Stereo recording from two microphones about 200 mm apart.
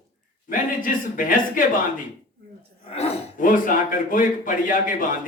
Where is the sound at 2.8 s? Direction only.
30° left (ahead or behind).